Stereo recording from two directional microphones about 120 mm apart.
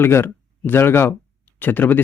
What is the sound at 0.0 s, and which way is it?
Speech, 20° left (ahead or behind).